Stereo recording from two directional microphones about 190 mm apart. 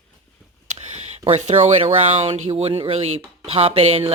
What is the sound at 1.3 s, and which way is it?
Speech, 30° right (ahead or behind).